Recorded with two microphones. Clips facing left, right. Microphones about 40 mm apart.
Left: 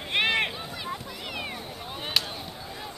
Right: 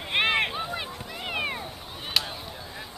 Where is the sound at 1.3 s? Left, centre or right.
Right.